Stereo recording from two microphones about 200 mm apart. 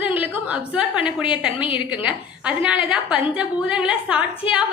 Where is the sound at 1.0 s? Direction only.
25° left (ahead or behind).